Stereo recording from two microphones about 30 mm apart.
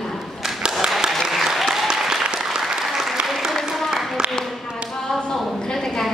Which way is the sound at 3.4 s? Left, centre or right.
Centre.